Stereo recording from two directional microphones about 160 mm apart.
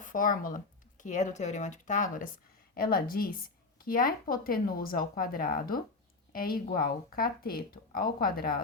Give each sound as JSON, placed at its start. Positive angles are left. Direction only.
{"t": 0.0, "sound": "speech", "side_deg": 55}
{"t": 2.7, "sound": "speech", "side_deg": 65}